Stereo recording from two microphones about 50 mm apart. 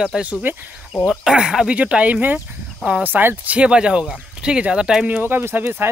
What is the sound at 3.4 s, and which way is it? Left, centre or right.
Speech, right.